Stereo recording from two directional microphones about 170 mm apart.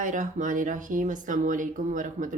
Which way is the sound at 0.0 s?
50° right (ahead or behind).